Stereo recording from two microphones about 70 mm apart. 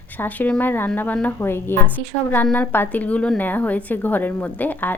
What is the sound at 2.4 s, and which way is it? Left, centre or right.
A woman's voice, centre.